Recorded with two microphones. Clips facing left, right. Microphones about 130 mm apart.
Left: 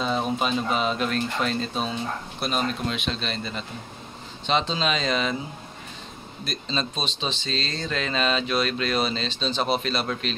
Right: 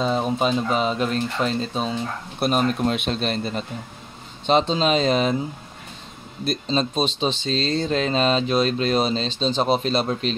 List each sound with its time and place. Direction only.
0.4 s speech: 30° right (ahead or behind)
2.4 s speech: 45° right (ahead or behind)
6.5 s speech: 40° right (ahead or behind)